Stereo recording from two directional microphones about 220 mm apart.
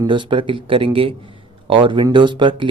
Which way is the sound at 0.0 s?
20° right (ahead or behind).